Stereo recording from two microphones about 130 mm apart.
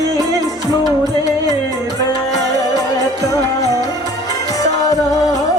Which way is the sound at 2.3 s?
25° left (ahead or behind).